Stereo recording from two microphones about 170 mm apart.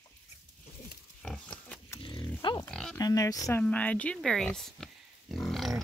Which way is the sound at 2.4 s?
25° left (ahead or behind).